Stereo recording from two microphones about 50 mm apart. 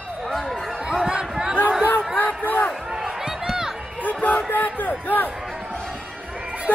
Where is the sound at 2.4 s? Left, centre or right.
Left.